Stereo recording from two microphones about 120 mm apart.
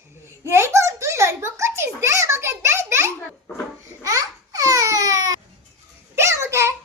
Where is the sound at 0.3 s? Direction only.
20° right (ahead or behind).